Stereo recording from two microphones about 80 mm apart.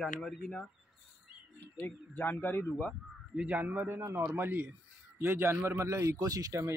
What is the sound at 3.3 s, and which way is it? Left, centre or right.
A man's voice, centre.